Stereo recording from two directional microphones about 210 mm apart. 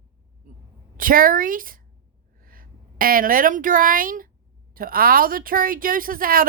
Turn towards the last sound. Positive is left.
turn(degrees=-45)  # may be behind; listen again after turning